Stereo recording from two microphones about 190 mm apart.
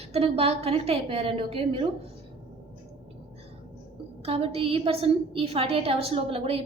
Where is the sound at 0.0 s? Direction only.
30° right (ahead or behind).